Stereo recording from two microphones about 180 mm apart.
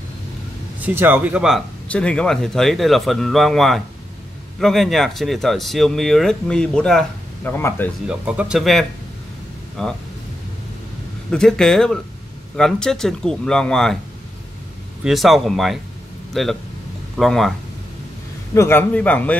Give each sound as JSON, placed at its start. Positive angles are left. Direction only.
{"t": 0.7, "sound": "speech", "side_deg": -10}
{"t": 1.9, "sound": "speech", "side_deg": 5}
{"t": 8.1, "sound": "speech", "side_deg": -5}
{"t": 11.2, "sound": "speech", "side_deg": 5}
{"t": 15.0, "sound": "speech", "side_deg": 0}
{"t": 18.5, "sound": "a man's voice", "side_deg": 15}